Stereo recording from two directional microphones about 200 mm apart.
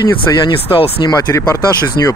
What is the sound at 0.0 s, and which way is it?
Speech, 20° left (ahead or behind).